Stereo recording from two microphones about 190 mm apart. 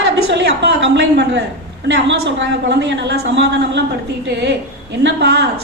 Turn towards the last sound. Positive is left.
turn(degrees=-60)  # may be behind; listen again after turning